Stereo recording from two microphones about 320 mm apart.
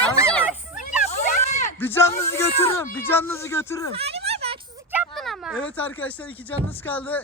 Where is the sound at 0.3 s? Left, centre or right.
Centre.